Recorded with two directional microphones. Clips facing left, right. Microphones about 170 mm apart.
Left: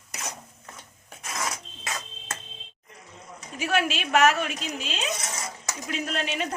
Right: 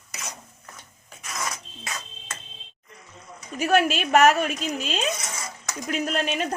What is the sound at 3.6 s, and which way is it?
Speech, 40° right (ahead or behind).